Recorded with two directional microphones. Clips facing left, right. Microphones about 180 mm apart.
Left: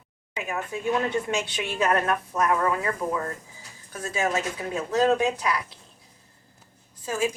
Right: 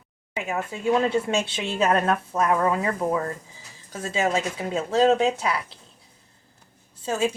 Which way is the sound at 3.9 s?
25° right (ahead or behind).